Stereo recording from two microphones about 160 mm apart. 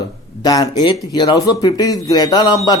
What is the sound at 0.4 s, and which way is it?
Speech, 25° left (ahead or behind).